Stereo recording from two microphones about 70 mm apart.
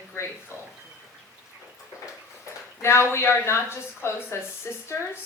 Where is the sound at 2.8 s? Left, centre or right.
Left.